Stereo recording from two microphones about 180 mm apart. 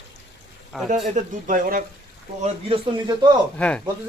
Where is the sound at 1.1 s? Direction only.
50° right (ahead or behind).